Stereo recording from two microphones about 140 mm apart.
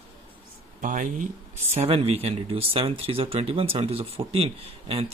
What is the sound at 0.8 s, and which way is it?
Speech, 70° right (ahead or behind).